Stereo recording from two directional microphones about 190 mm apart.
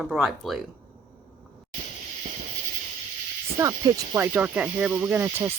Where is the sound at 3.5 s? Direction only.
15° right (ahead or behind).